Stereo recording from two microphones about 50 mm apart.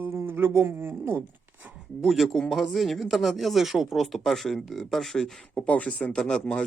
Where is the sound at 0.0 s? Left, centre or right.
Right.